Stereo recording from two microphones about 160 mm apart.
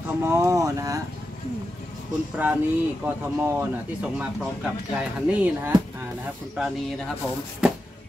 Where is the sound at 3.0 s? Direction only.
15° right (ahead or behind).